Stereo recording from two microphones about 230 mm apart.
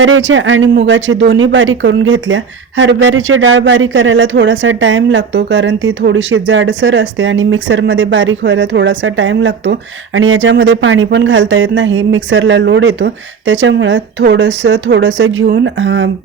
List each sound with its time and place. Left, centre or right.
0.0 s speech: right